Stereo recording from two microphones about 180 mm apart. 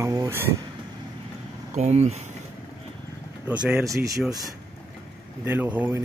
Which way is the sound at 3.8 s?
15° right (ahead or behind).